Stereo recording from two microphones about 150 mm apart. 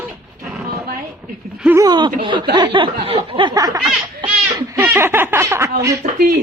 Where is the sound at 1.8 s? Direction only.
30° right (ahead or behind).